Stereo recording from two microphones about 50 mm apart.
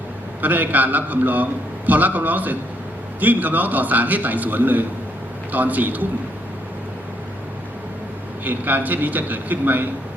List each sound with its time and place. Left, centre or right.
0.4 s a man's voice: right
8.4 s a man's voice: right